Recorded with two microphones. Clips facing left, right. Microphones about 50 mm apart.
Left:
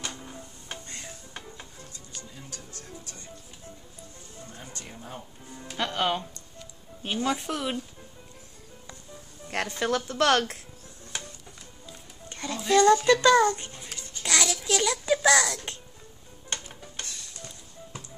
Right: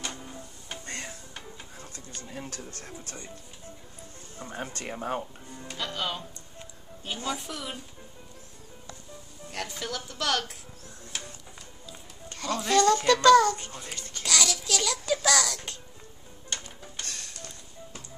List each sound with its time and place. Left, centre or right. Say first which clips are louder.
0.2 s music: even; centre
0.8 s music: right 4 dB; right
1.3 s music: left 1 dB; centre
2.2 s speech: right 5 dB; right
4.4 s music: right 9 dB; right
4.7 s speech: right 10 dB; right
5.5 s speech: even; centre
5.8 s speech: left 6 dB; left
7.2 s speech: left 5 dB; left
9.5 s speech: left 8 dB; left
12.3 s music: right 3 dB; left
12.7 s a child's voice: left 3 dB; centre
17.0 s music: right 2 dB; right
17.4 s music: even; centre